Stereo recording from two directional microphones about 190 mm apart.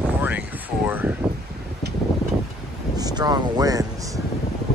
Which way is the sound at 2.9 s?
20° right (ahead or behind).